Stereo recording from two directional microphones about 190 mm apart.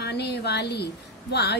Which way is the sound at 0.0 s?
60° left (ahead or behind).